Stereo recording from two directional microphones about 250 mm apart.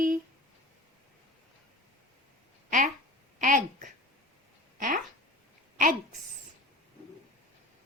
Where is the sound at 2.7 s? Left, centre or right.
Right.